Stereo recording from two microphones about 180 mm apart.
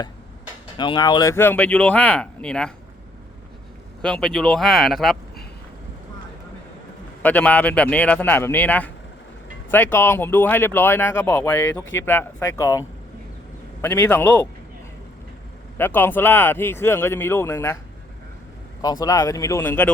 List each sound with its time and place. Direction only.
0.8 s speech: 25° left (ahead or behind); by 2.7 s 5° left (ahead or behind)
4.0 s speech: 5° left (ahead or behind)
7.2 s speech: 10° left (ahead or behind)
13.8 s speech: 10° left (ahead or behind)
15.8 s speech: 10° left (ahead or behind)
18.8 s speech: 20° left (ahead or behind)